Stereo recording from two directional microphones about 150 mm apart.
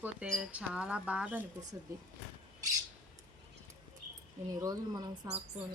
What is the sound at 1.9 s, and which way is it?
Speech, 20° right (ahead or behind).